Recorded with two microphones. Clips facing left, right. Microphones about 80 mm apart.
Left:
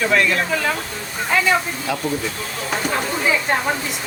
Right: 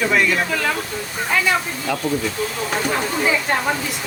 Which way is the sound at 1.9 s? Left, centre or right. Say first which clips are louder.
Right 1 dB; centre.